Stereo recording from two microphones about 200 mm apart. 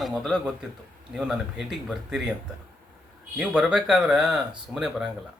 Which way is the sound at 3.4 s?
5° right (ahead or behind).